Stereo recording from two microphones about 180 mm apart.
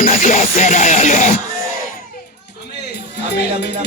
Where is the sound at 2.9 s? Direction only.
65° left (ahead or behind).